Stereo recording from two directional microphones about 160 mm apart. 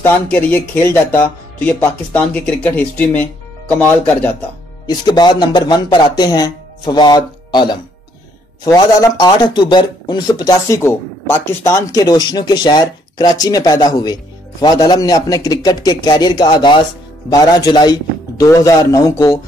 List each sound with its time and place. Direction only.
0.0 s speech: 10° left (ahead or behind)
4.8 s speech: 25° left (ahead or behind)